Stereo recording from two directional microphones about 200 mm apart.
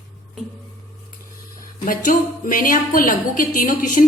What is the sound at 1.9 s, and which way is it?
A woman's voice, 40° left (ahead or behind).